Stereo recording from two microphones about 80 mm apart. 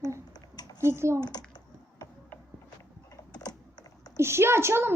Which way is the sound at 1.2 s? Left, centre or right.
Left.